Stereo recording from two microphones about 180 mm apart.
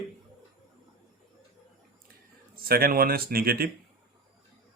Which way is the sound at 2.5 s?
55° right (ahead or behind).